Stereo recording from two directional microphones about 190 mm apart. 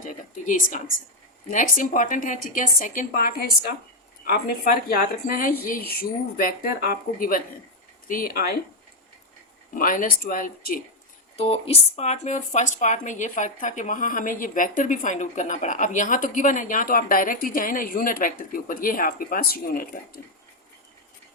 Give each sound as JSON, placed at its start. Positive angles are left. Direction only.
{"t": 0.0, "sound": "a sound", "side_deg": 45}
{"t": 1.5, "sound": "speech", "side_deg": 45}
{"t": 4.6, "sound": "speech", "side_deg": 50}
{"t": 9.7, "sound": "speech", "side_deg": 45}
{"t": 11.3, "sound": "speech", "side_deg": 30}